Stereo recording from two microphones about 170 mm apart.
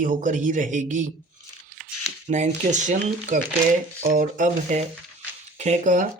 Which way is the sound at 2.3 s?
45° right (ahead or behind).